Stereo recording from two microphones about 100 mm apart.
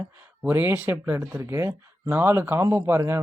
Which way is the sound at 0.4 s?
20° right (ahead or behind).